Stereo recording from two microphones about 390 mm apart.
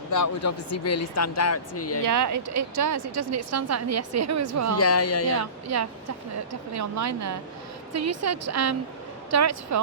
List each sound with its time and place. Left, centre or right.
0.1 s speech: left
2.0 s a woman's voice: right
4.8 s speech: left
5.6 s a woman's voice: right